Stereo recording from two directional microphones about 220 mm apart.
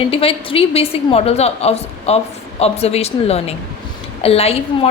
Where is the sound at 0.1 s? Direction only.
25° left (ahead or behind).